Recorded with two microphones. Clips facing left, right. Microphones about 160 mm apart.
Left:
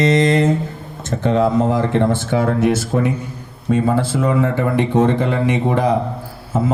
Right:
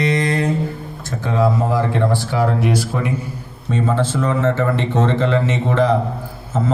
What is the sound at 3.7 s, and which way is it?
Speech, 10° left (ahead or behind).